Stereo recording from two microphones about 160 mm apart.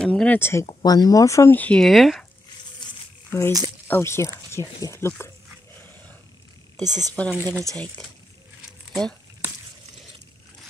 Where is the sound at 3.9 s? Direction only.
15° left (ahead or behind).